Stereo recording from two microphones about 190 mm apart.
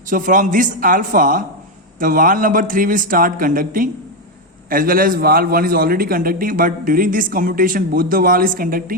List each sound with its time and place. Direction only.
0.1 s a man's voice: 45° right (ahead or behind)